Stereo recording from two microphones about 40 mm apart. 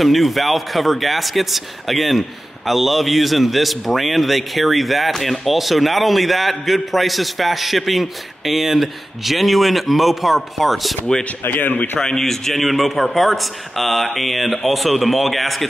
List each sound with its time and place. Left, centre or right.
0.0 s a man's voice: centre
11.4 s speech: left
12.2 s a man's voice: centre